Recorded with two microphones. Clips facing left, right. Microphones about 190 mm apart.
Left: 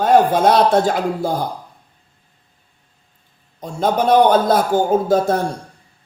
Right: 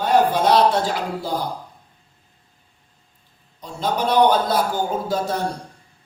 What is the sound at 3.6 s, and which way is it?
A man's voice, 50° left (ahead or behind).